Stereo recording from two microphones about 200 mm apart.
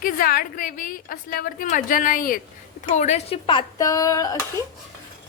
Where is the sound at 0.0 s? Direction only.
45° left (ahead or behind).